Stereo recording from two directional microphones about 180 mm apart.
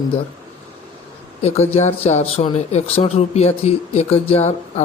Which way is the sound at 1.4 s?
35° left (ahead or behind).